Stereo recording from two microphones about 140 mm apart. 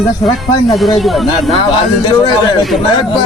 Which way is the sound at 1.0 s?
Centre (ahead or behind).